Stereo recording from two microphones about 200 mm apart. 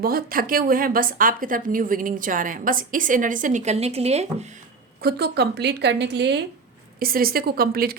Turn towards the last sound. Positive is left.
turn(degrees=-50)  # may be behind; listen again after turning